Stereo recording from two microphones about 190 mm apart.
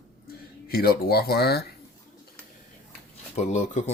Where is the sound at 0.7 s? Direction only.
55° left (ahead or behind).